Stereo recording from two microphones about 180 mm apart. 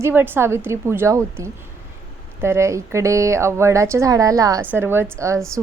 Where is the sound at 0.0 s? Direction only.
10° right (ahead or behind).